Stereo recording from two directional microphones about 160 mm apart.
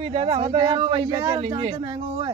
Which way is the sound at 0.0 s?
35° right (ahead or behind).